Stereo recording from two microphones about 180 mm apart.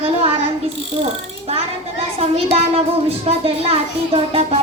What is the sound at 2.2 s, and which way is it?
A woman's voice, 35° right (ahead or behind).